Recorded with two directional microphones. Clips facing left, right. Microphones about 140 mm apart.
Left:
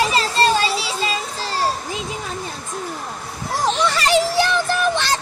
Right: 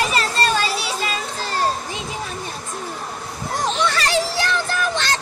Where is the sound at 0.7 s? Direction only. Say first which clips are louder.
Left 1 dB; 25° left (ahead or behind).